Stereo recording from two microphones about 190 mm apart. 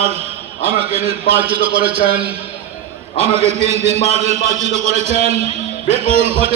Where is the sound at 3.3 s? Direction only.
15° right (ahead or behind).